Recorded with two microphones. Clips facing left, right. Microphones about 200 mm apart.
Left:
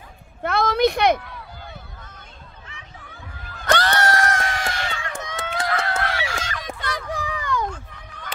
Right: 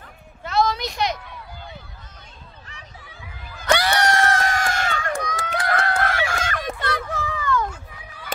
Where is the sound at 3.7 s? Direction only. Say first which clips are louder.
Even; 10° right (ahead or behind).